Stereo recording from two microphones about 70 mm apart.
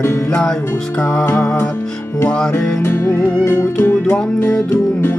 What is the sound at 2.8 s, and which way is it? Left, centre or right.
Music, left.